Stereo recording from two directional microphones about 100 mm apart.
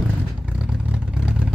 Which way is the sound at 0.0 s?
15° right (ahead or behind).